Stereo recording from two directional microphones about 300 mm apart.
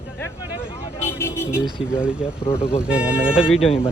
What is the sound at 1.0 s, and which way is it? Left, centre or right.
Speech, centre.